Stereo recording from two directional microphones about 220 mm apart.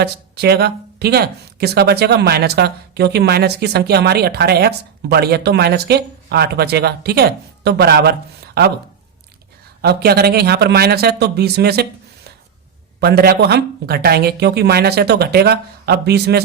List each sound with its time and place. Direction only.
0.0 s speech: 45° right (ahead or behind)
9.8 s speech: 45° right (ahead or behind)